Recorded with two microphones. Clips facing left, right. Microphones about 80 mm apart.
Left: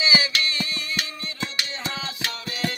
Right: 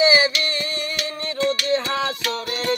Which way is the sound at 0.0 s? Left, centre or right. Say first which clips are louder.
Right 7 dB; right.